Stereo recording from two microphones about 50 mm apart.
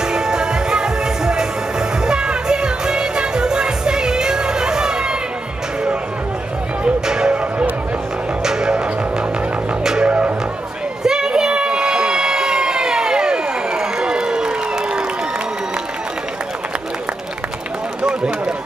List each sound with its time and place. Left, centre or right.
0.0 s music: centre
6.8 s music: centre
8.5 s music: centre
10.0 s music: right
11.1 s a sound: centre